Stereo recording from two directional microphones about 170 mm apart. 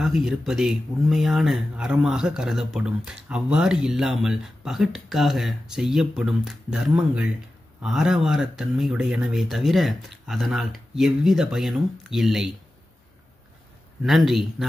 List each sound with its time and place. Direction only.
0.0 s speech: centre (ahead or behind)
14.0 s speech: centre (ahead or behind)